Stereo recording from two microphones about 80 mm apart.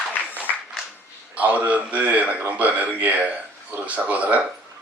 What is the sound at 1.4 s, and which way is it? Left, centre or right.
A man's voice, right.